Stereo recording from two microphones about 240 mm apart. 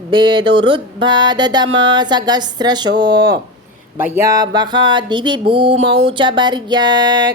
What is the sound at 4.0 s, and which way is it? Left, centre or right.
Music, centre.